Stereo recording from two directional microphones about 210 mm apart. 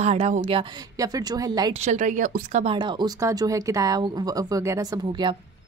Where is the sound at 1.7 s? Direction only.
35° right (ahead or behind).